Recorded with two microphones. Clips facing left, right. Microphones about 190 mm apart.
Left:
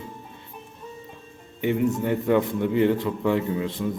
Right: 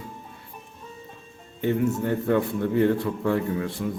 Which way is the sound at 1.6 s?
15° left (ahead or behind).